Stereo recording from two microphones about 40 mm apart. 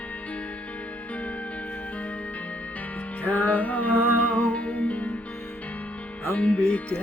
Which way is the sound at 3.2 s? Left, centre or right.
Left.